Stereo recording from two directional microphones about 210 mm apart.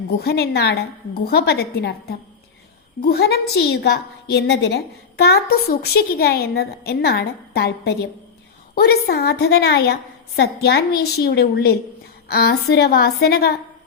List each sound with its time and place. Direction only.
0.1 s a woman's voice: 50° left (ahead or behind)